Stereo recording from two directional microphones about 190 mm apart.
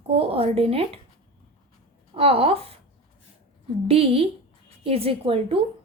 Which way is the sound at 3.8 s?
30° right (ahead or behind).